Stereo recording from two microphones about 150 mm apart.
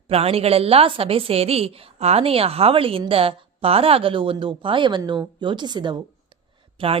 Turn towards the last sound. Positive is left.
turn(degrees=-35)  # may be behind; listen again after turning